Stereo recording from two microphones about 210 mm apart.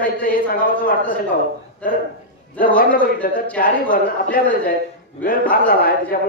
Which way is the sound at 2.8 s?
40° left (ahead or behind).